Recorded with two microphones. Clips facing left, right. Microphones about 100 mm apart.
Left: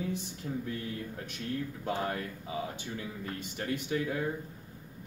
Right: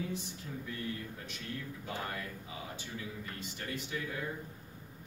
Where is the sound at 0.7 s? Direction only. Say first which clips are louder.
Left 3 dB; 55° left (ahead or behind).